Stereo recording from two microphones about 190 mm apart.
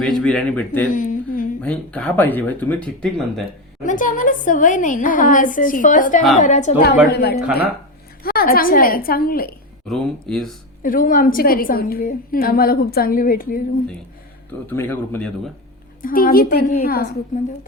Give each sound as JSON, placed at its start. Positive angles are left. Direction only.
{"t": 0.0, "sound": "speech", "side_deg": 5}
{"t": 0.9, "sound": "a sound", "side_deg": 45}
{"t": 1.6, "sound": "speech", "side_deg": 5}
{"t": 3.8, "sound": "a woman's voice", "side_deg": 45}
{"t": 6.7, "sound": "a woman's voice", "side_deg": 55}
{"t": 9.8, "sound": "speech", "side_deg": 0}
{"t": 10.8, "sound": "a woman's voice", "side_deg": 45}
{"t": 14.7, "sound": "speech", "side_deg": 10}
{"t": 16.0, "sound": "a woman's voice", "side_deg": 45}